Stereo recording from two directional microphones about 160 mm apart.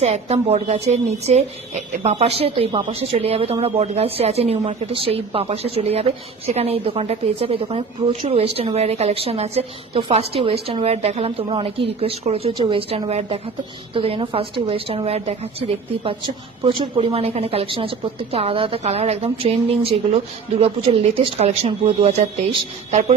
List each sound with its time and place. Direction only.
0.0 s speech: 40° right (ahead or behind)